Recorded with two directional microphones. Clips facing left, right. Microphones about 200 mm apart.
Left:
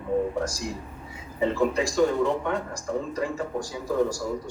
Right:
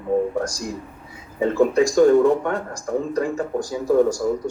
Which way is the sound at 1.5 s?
50° right (ahead or behind).